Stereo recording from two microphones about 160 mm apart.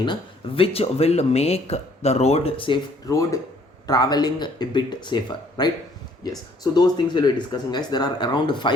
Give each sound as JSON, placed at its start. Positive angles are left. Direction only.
{"t": 0.0, "sound": "speech", "side_deg": 30}
{"t": 3.1, "sound": "speech", "side_deg": 20}